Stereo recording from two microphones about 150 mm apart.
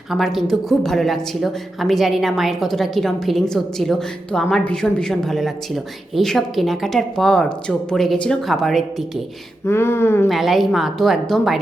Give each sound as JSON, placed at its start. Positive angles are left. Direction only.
{"t": 0.1, "sound": "a woman's voice", "side_deg": 0}
{"t": 9.6, "sound": "a sound", "side_deg": 15}
{"t": 10.2, "sound": "a woman's voice", "side_deg": 0}